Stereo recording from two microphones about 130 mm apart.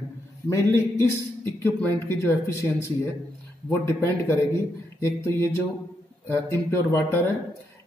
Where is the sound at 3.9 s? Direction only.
20° left (ahead or behind).